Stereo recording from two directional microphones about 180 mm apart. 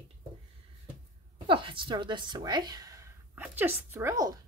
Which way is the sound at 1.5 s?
30° right (ahead or behind).